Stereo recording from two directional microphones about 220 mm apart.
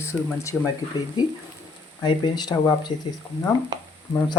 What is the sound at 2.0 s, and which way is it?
Speech, 20° left (ahead or behind).